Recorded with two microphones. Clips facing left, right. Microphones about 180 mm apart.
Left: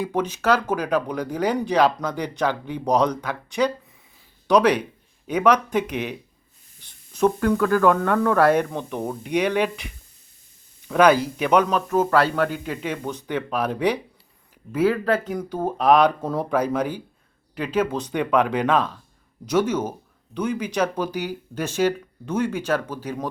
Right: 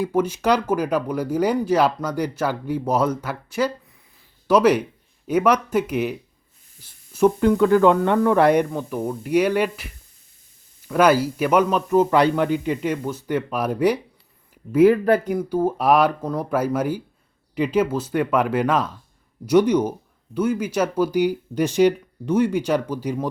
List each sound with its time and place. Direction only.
0.0 s a man's voice: 5° right (ahead or behind)
8.7 s a man's voice: 5° right (ahead or behind)